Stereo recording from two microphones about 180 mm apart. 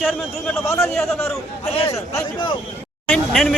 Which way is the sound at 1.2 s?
35° left (ahead or behind).